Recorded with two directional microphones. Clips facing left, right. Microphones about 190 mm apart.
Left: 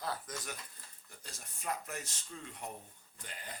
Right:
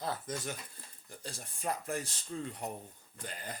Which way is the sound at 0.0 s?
25° right (ahead or behind).